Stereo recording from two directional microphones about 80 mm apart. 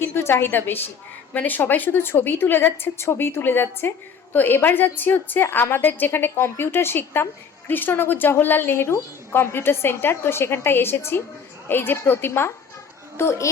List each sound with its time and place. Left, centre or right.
0.0 s a woman's voice: left